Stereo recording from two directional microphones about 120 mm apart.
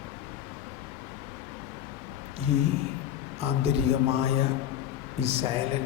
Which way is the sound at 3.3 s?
55° right (ahead or behind).